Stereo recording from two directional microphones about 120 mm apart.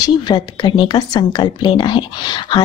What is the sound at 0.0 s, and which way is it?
A woman's voice, 35° left (ahead or behind).